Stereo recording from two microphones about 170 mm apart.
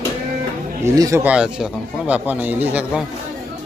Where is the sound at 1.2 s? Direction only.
5° right (ahead or behind).